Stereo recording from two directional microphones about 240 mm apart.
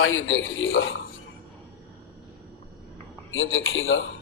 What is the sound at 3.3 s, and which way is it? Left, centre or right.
Speech, left.